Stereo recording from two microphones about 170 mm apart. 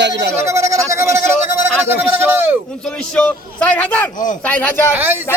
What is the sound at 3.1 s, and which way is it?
A man's voice, 10° left (ahead or behind).